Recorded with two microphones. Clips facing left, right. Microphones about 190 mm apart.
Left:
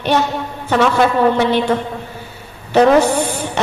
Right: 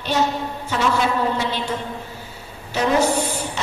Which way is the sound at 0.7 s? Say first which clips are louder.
Left 7 dB; 65° left (ahead or behind).